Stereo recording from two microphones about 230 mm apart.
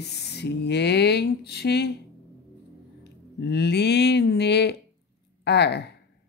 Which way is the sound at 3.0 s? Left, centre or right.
Left.